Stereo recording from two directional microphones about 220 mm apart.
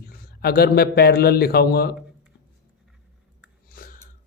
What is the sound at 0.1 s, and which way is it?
A man's voice, 45° left (ahead or behind).